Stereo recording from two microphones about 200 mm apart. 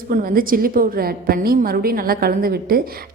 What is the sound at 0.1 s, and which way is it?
A woman's voice, 45° right (ahead or behind).